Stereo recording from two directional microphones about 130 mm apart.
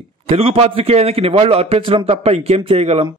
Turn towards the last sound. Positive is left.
turn(degrees=-50)  # may be behind; listen again after turning